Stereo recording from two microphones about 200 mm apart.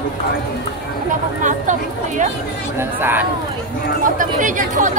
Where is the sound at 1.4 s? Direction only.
40° right (ahead or behind).